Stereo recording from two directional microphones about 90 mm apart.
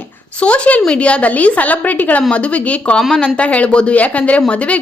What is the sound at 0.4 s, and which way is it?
A woman's voice, 15° left (ahead or behind).